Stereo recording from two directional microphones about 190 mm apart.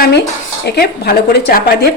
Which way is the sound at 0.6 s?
55° left (ahead or behind).